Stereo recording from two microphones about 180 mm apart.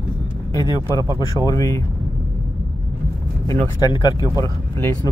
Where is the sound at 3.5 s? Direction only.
20° left (ahead or behind).